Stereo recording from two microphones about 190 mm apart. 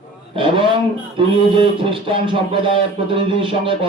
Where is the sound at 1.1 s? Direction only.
25° right (ahead or behind).